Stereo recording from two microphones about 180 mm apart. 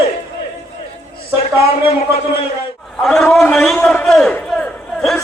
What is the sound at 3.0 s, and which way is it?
A man's voice, 5° left (ahead or behind).